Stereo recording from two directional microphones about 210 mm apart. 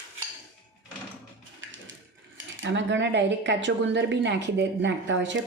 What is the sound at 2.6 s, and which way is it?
A woman's voice, 60° right (ahead or behind).